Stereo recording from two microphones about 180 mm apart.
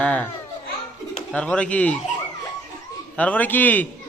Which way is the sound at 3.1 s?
10° left (ahead or behind).